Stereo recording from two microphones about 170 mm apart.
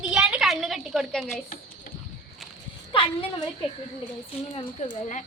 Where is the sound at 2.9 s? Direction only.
30° left (ahead or behind).